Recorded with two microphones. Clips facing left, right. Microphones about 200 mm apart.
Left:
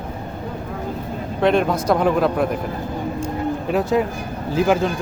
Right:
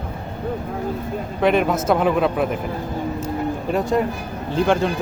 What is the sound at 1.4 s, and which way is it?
A man's voice, 5° right (ahead or behind).